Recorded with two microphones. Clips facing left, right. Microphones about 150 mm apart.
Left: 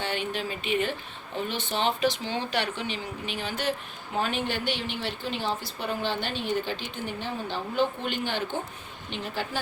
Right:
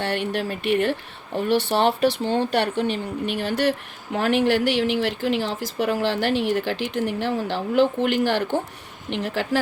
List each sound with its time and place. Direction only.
0.0 s speech: 70° right (ahead or behind); by 9.6 s 90° right